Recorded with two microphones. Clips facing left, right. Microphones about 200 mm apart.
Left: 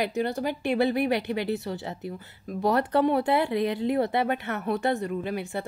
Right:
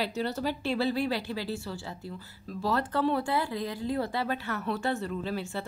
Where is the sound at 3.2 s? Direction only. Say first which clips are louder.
Left 6 dB; 20° left (ahead or behind).